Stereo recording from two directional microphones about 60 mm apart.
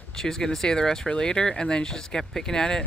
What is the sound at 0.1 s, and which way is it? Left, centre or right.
Speech, centre.